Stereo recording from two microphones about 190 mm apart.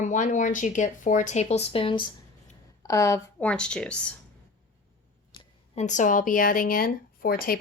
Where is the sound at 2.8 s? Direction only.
15° left (ahead or behind).